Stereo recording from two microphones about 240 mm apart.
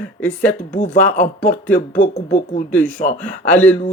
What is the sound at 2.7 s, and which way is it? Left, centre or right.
Speech, centre.